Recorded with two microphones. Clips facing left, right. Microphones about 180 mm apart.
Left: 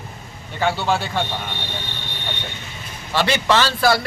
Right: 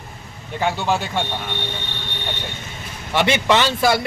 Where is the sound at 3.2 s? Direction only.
20° right (ahead or behind).